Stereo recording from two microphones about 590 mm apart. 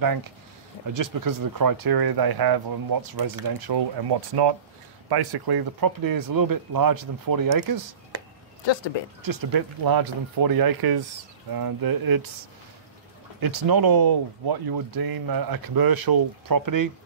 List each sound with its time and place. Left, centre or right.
0.0 s speech: right
9.2 s speech: right
13.4 s speech: right